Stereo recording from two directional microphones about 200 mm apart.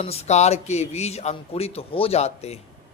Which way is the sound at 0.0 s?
30° left (ahead or behind).